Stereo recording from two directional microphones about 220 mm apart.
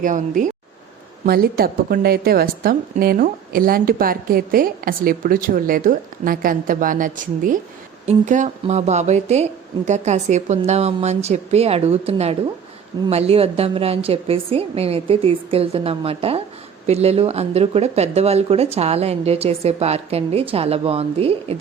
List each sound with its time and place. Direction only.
0.0 s speech: 35° right (ahead or behind)